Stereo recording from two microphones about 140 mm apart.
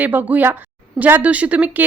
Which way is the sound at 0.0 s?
10° right (ahead or behind).